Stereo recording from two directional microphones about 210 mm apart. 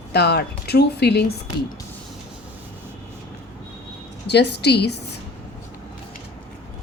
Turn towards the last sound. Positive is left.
turn(degrees=50)  # may be behind; listen again after turning